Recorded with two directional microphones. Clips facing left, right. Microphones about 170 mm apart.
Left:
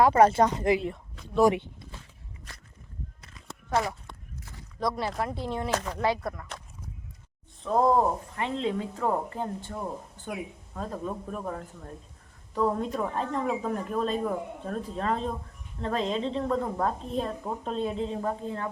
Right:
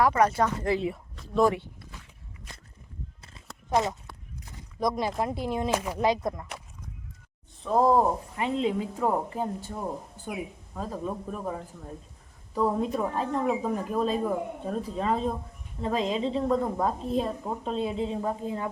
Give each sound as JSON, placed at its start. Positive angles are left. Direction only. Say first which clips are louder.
{"t": 0.0, "sound": "speech", "louder": "left 3 dB", "side_deg": 30}
{"t": 0.8, "sound": "a woman's voice", "louder": "right 3 dB", "side_deg": 0}
{"t": 1.5, "sound": "a sound", "louder": "left 2 dB", "side_deg": 20}
{"t": 3.7, "sound": "speech", "louder": "right 2 dB", "side_deg": -20}
{"t": 7.6, "sound": "speech", "louder": "right 1 dB", "side_deg": -5}
{"t": 10.8, "sound": "a woman's voice", "louder": "right 1 dB", "side_deg": -5}